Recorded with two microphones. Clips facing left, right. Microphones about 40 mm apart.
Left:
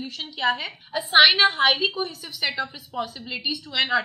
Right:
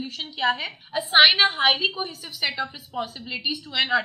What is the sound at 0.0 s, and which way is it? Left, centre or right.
A woman's voice, centre.